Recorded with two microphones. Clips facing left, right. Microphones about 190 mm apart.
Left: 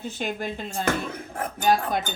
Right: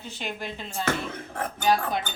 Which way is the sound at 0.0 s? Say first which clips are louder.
Left 5 dB; 50° left (ahead or behind).